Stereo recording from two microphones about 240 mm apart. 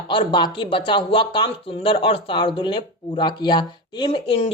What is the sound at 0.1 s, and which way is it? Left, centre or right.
Speech, centre.